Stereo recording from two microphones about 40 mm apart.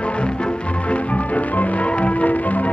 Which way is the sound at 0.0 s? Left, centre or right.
Left.